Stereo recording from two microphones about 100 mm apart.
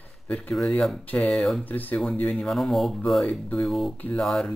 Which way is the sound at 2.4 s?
Centre (ahead or behind).